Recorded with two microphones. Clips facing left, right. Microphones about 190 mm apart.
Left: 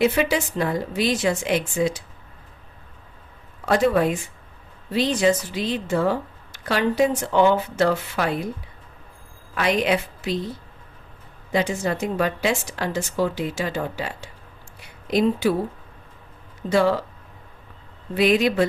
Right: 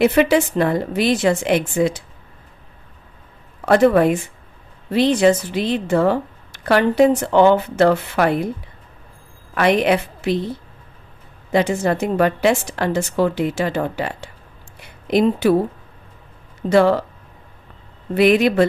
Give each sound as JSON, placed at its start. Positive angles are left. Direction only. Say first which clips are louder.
{"t": 0.0, "sound": "a woman's voice", "louder": "right 6 dB", "side_deg": -60}
{"t": 3.7, "sound": "a woman's voice", "louder": "right 6 dB", "side_deg": -60}
{"t": 9.6, "sound": "a woman's voice", "louder": "right 5 dB", "side_deg": -60}
{"t": 11.5, "sound": "a woman's voice", "louder": "right 5 dB", "side_deg": -60}
{"t": 14.8, "sound": "a sound", "louder": "right 4 dB", "side_deg": -60}
{"t": 16.7, "sound": "a woman's voice", "louder": "right 5 dB", "side_deg": -60}
{"t": 18.1, "sound": "a woman's voice", "louder": "right 5 dB", "side_deg": -60}